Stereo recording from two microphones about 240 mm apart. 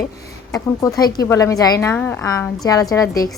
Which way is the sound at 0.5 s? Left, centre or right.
Centre.